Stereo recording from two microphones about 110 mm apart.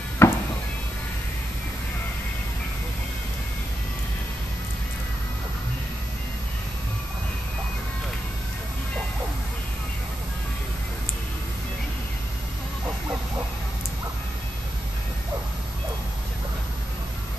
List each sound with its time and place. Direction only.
0.2 s chop: 20° left (ahead or behind)